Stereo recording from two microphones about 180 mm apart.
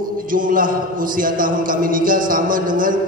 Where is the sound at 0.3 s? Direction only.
50° right (ahead or behind).